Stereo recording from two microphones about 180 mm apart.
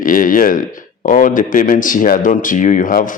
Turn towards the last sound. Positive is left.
turn(degrees=50)  # may be behind; listen again after turning